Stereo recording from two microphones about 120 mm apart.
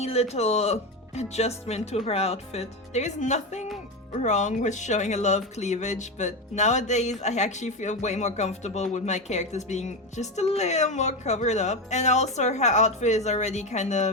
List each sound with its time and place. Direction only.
0.0 s speech: 60° left (ahead or behind); by 14.1 s 75° left (ahead or behind)